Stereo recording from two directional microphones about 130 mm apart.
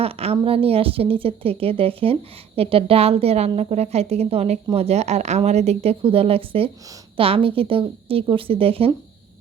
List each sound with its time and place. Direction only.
0.0 s a woman's voice: 50° right (ahead or behind)